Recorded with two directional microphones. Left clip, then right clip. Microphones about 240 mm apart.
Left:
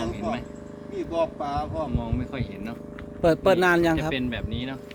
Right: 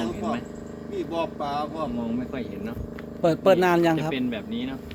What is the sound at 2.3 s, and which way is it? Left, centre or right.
Speech, left.